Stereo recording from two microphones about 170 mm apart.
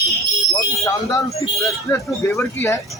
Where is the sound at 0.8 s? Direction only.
20° left (ahead or behind).